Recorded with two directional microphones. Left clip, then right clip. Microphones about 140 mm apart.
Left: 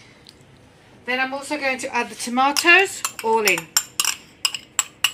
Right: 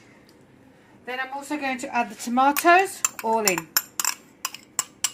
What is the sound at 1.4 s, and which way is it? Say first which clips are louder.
Dishes: left 5 dB; 60° right (ahead or behind).